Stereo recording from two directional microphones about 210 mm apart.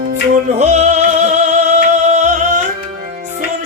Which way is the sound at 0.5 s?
30° right (ahead or behind).